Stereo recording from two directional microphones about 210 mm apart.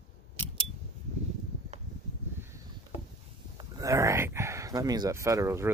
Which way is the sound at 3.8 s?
15° right (ahead or behind).